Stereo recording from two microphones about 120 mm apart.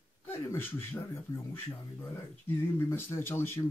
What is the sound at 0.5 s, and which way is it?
Speech, 20° left (ahead or behind).